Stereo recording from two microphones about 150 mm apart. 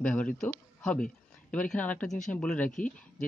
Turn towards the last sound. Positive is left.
turn(degrees=60)  # may be behind; listen again after turning